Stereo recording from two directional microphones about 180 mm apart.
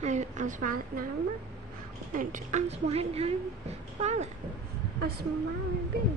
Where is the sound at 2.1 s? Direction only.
45° right (ahead or behind).